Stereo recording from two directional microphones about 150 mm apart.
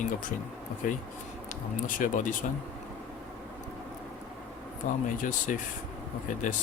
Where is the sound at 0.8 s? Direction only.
60° left (ahead or behind).